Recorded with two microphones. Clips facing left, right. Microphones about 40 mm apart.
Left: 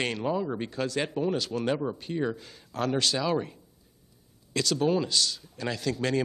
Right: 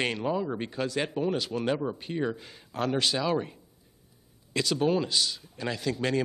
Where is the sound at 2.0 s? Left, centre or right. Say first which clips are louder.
Left 1 dB; right.